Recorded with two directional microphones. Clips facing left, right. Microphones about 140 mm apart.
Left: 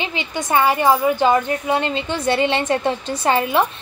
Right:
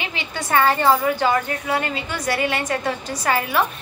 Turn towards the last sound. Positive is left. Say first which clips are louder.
# left 3 dB
turn(degrees=25)  # may be behind; listen again after turning